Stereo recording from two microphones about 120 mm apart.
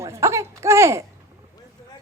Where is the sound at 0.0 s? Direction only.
25° right (ahead or behind).